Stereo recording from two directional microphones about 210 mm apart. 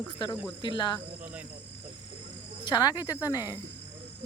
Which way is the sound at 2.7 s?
20° left (ahead or behind).